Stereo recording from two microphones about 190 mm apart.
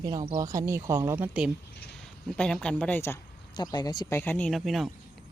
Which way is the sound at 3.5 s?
20° left (ahead or behind).